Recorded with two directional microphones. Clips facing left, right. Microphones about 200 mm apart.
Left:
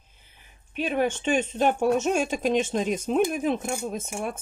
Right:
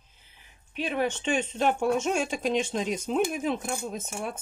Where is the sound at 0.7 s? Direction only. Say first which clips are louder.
Left 3 dB; 45° left (ahead or behind).